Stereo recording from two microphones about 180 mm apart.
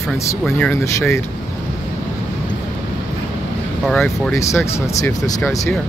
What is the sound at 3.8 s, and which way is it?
Speech, 5° left (ahead or behind).